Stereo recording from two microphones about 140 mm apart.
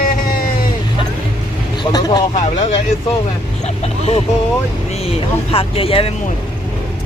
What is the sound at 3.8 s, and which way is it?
Speech, 50° left (ahead or behind).